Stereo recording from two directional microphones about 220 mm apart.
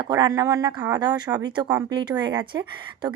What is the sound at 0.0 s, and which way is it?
Speech, 20° right (ahead or behind).